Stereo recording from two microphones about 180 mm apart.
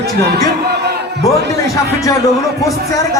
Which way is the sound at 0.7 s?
65° right (ahead or behind).